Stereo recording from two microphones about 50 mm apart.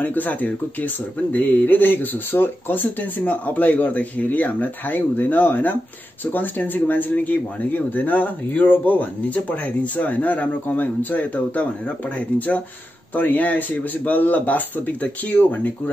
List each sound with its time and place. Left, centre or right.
0.0 s speech: left